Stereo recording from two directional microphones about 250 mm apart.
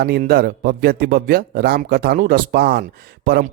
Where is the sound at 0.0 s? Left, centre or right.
Right.